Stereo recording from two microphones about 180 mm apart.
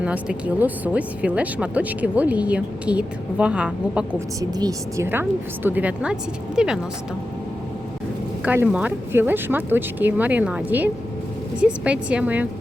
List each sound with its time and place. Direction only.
0.0 s speech: 5° right (ahead or behind)
4.4 s speech: 20° right (ahead or behind); by 6.7 s 5° right (ahead or behind)
8.4 s speech: 5° right (ahead or behind)